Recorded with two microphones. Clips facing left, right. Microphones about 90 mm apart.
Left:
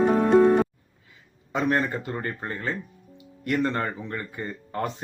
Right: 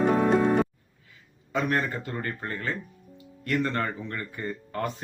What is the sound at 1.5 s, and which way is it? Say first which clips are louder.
Speech: left 2 dB; 20° left (ahead or behind).